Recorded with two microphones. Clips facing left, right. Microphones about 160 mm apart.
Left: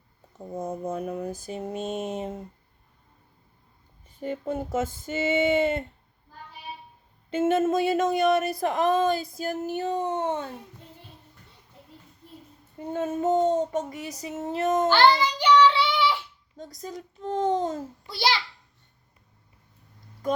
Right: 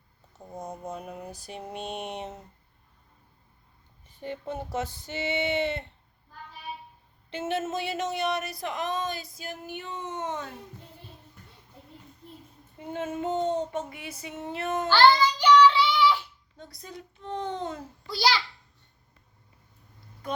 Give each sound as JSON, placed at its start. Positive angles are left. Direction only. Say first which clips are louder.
{"t": 0.3, "sound": "speech", "louder": "left 7 dB", "side_deg": 50}
{"t": 4.3, "sound": "speech", "louder": "left 5 dB", "side_deg": 50}
{"t": 7.3, "sound": "speech", "louder": "left 8 dB", "side_deg": 50}
{"t": 12.8, "sound": "child singing", "louder": "left 5 dB", "side_deg": 40}
{"t": 14.8, "sound": "a child's voice", "louder": "right 2 dB", "side_deg": 20}
{"t": 15.8, "sound": "a sound", "louder": "right 1 dB", "side_deg": 25}
{"t": 16.6, "sound": "child singing", "louder": "left 6 dB", "side_deg": 40}
{"t": 18.0, "sound": "a child's voice", "louder": "right 1 dB", "side_deg": 20}
{"t": 20.2, "sound": "speech", "louder": "left 6 dB", "side_deg": 45}